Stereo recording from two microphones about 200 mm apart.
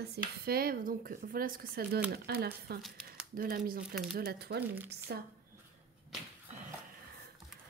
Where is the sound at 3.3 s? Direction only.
45° right (ahead or behind).